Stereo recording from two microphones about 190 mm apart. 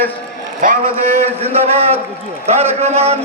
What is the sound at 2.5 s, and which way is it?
Speech, 35° right (ahead or behind).